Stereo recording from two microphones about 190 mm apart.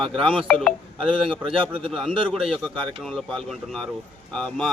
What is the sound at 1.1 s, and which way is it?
Speech, 25° right (ahead or behind).